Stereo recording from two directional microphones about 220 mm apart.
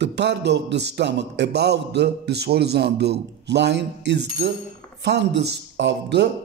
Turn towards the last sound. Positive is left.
turn(degrees=-50)  # may be behind; listen again after turning